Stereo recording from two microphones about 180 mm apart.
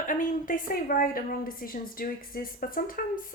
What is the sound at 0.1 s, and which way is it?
A woman's voice, 50° left (ahead or behind).